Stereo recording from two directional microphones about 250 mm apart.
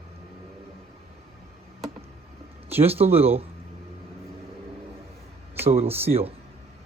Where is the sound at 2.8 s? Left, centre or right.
Right.